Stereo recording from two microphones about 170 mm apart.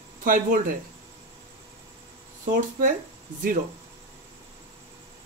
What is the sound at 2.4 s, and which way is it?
Speech, 55° right (ahead or behind).